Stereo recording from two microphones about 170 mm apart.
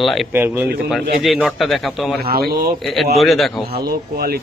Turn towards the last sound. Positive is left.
turn(degrees=-65)  # may be behind; listen again after turning